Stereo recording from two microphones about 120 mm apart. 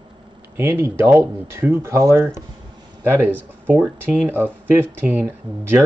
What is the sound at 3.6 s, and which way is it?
Speech, 15° right (ahead or behind).